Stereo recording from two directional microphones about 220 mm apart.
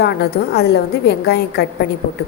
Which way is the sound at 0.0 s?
45° left (ahead or behind).